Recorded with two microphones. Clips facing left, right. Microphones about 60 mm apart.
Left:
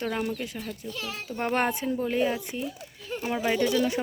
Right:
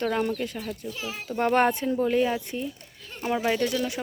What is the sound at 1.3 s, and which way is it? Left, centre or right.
Speech, centre.